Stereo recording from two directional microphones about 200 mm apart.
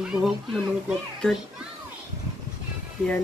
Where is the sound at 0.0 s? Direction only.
5° right (ahead or behind).